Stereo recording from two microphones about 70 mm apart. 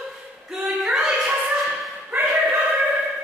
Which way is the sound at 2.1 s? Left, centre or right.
Right.